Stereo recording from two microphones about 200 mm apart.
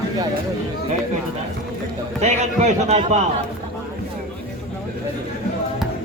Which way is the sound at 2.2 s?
35° right (ahead or behind).